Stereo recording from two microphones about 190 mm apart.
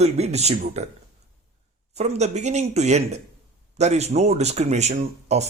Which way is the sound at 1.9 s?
35° right (ahead or behind).